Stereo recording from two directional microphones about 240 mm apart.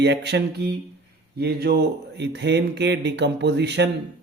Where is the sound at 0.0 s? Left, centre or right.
Right.